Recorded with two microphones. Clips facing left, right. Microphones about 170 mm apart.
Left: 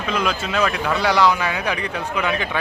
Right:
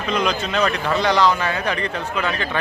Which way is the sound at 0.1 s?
5° left (ahead or behind).